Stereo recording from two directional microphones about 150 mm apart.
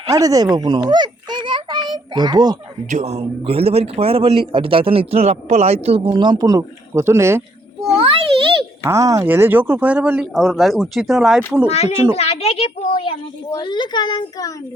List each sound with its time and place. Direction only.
0.1 s a child's voice: 25° right (ahead or behind)
2.9 s speech: 50° right (ahead or behind)
6.1 s speech: 30° right (ahead or behind)
8.8 s speech: 20° right (ahead or behind)
11.7 s a child's voice: 45° left (ahead or behind); by 14.5 s 25° left (ahead or behind)